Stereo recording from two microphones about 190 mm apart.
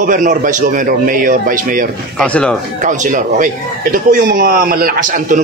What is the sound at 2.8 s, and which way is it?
A man's voice, 40° right (ahead or behind).